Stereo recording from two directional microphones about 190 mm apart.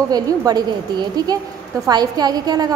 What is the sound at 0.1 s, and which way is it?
A woman's voice, 20° right (ahead or behind).